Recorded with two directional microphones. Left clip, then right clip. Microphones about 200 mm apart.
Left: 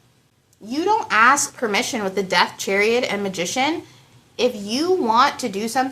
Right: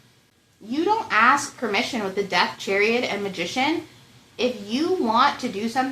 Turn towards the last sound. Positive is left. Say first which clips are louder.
# left 3 dB
turn(degrees=25)  # may be behind; listen again after turning